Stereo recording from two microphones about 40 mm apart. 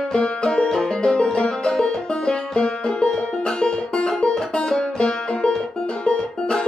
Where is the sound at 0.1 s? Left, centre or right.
Centre.